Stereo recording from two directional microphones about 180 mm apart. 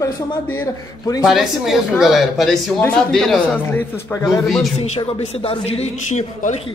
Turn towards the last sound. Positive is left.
turn(degrees=40)  # may be behind; listen again after turning